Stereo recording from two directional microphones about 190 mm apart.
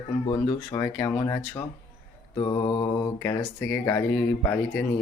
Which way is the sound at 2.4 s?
25° left (ahead or behind).